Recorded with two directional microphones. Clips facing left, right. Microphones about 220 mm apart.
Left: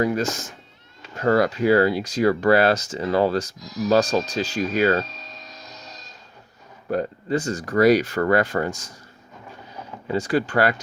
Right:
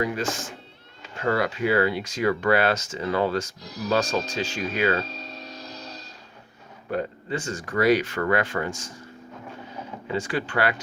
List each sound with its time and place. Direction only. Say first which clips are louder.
0.0 s speech: left 4 dB; 40° left (ahead or behind)
3.6 s speech: left 6 dB; 30° right (ahead or behind)
3.8 s speech: left 5 dB; 35° left (ahead or behind)
5.0 s music: right 5 dB; 30° right (ahead or behind)
6.9 s speech: left 5 dB; 40° left (ahead or behind)
10.1 s speech: left 6 dB; 40° left (ahead or behind)